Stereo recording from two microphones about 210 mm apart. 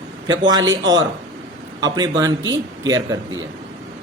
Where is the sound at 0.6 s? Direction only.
60° right (ahead or behind).